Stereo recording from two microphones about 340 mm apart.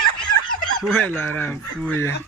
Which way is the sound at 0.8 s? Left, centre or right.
Centre.